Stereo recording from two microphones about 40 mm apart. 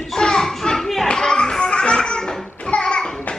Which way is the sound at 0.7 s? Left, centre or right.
Centre.